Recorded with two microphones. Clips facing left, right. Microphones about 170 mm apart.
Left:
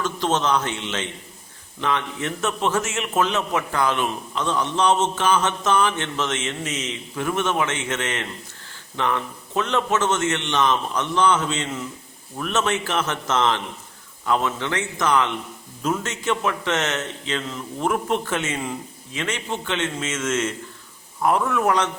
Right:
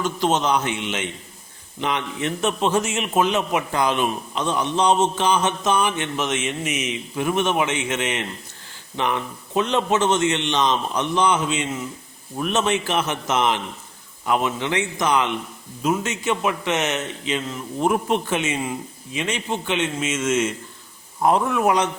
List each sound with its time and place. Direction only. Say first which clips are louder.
0.0 s a man's voice: right 2 dB; 10° right (ahead or behind)